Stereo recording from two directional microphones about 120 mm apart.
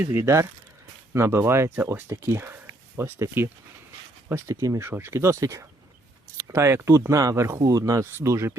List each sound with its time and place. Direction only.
0.0 s speech: 20° right (ahead or behind)
4.8 s speech: 20° right (ahead or behind)